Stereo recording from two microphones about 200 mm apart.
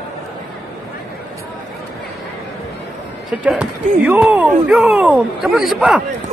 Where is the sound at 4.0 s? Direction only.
10° right (ahead or behind).